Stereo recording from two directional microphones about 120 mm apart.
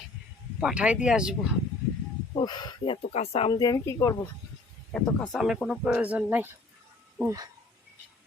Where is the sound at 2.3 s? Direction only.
35° left (ahead or behind).